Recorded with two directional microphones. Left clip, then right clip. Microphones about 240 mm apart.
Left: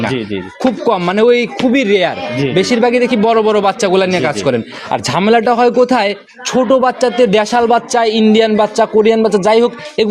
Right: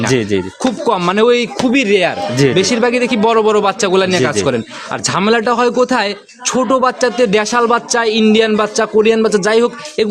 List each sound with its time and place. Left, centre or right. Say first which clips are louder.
0.1 s speech: right 5 dB; right
0.6 s a man's voice: left 3 dB; centre